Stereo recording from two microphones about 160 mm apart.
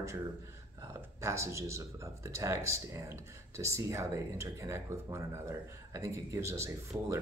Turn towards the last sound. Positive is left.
turn(degrees=-15)  # may be behind; listen again after turning